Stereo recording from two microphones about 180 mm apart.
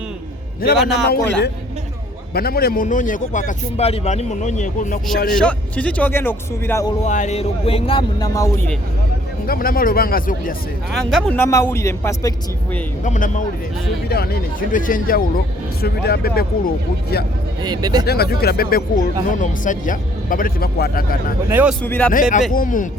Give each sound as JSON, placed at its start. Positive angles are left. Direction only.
{"t": 0.6, "sound": "a man's voice", "side_deg": 55}
{"t": 1.0, "sound": "a man's voice", "side_deg": 65}
{"t": 5.4, "sound": "speech", "side_deg": 5}
{"t": 7.0, "sound": "speech", "side_deg": 40}
{"t": 9.5, "sound": "a man's voice", "side_deg": 55}
{"t": 10.9, "sound": "speech", "side_deg": 0}
{"t": 11.3, "sound": "speech", "side_deg": 15}
{"t": 13.1, "sound": "a man's voice", "side_deg": 45}
{"t": 14.1, "sound": "a man's voice", "side_deg": 60}
{"t": 17.6, "sound": "speech", "side_deg": -20}
{"t": 18.0, "sound": "a man's voice", "side_deg": 60}
{"t": 21.5, "sound": "speech", "side_deg": -10}
{"t": 21.8, "sound": "speech", "side_deg": 10}
{"t": 22.1, "sound": "a man's voice", "side_deg": 45}